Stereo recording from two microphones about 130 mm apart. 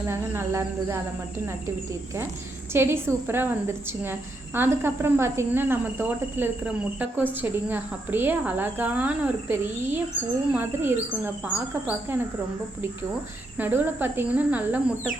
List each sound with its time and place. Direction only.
0.1 s cricket: 20° right (ahead or behind)
2.7 s a woman's voice: 20° right (ahead or behind)
13.6 s a woman's voice: 15° right (ahead or behind)